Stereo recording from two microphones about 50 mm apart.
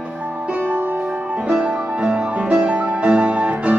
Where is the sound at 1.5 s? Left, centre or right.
Right.